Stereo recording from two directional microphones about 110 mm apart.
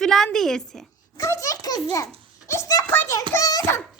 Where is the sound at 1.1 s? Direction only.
30° left (ahead or behind).